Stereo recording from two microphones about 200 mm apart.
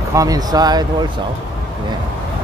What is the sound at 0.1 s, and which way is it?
Speech, 15° right (ahead or behind).